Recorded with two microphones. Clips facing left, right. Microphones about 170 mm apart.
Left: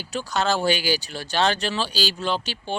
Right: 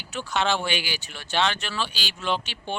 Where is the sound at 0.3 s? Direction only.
40° left (ahead or behind).